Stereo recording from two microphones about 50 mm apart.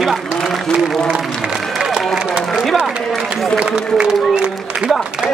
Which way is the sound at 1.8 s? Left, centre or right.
Centre.